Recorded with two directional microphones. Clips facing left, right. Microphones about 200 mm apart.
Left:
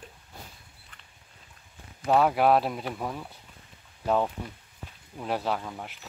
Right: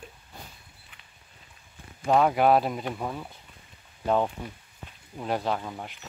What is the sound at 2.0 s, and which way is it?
Speech, 5° left (ahead or behind).